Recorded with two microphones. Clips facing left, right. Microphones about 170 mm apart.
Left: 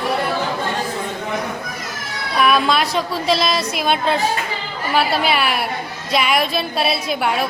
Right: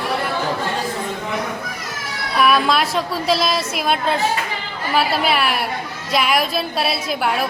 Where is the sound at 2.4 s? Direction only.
Centre (ahead or behind).